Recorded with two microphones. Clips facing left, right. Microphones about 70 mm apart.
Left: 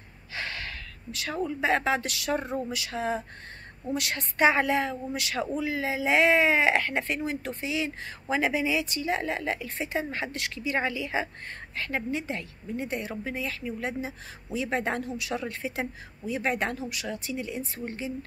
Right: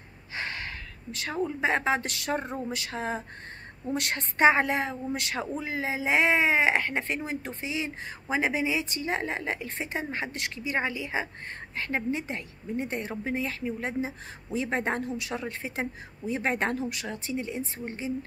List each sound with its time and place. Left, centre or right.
0.3 s speech: right
2.7 s a sound: right
3.9 s a woman's voice: right